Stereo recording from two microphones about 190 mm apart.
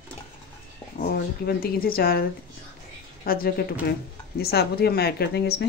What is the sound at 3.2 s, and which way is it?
A woman's voice, 50° left (ahead or behind).